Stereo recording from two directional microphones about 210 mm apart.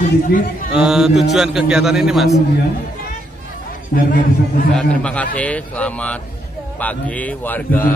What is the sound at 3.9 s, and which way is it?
Speech, 45° left (ahead or behind).